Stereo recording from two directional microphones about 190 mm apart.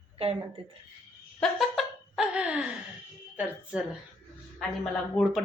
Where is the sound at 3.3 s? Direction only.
5° right (ahead or behind).